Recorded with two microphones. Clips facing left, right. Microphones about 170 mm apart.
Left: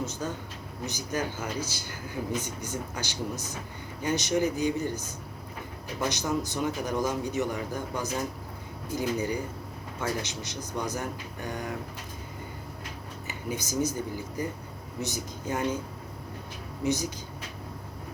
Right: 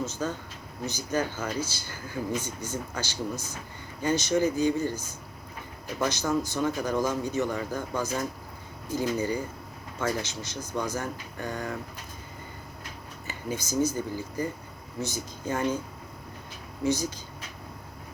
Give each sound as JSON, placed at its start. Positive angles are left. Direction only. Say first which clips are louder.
{"t": 0.0, "sound": "a man's voice", "louder": "right 2 dB", "side_deg": 15}
{"t": 13.2, "sound": "a man's voice", "louder": "right 1 dB", "side_deg": 15}
{"t": 16.8, "sound": "a man's voice", "louder": "right 1 dB", "side_deg": 20}